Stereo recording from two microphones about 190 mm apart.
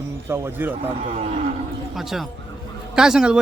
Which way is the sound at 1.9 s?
Centre (ahead or behind).